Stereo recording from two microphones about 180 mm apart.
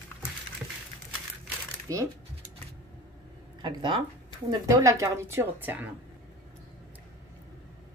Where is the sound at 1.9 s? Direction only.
20° right (ahead or behind).